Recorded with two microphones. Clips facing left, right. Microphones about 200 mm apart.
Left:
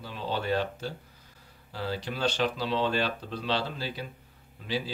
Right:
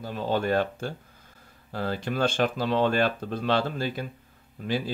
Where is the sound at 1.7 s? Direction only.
50° right (ahead or behind).